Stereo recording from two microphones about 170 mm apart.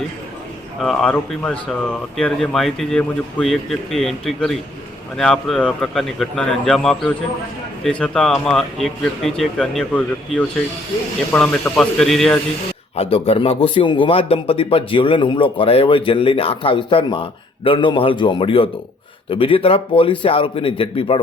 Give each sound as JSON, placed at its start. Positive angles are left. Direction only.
{"t": 0.8, "sound": "speech", "side_deg": 0}
{"t": 13.0, "sound": "a man's voice", "side_deg": 35}